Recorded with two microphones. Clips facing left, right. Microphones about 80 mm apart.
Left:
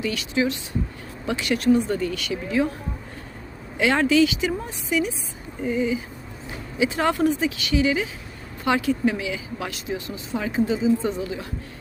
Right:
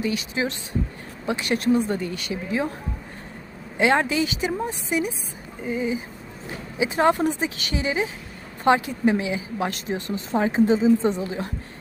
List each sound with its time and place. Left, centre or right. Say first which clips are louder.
0.0 s speech: left 2 dB; right
3.8 s speech: left 2 dB; right
9.7 s speech: right 2 dB; right